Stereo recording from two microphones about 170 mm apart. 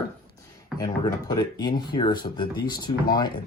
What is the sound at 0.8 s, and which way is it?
Speech, 20° left (ahead or behind).